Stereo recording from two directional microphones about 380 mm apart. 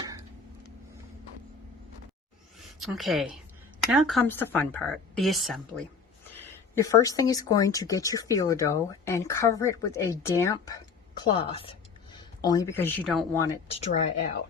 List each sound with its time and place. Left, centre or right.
2.6 s a woman's voice: centre
13.7 s speech: centre